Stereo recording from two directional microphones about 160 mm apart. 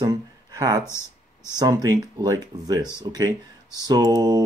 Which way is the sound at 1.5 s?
25° right (ahead or behind).